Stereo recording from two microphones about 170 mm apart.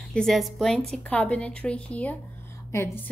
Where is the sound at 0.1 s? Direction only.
Centre (ahead or behind).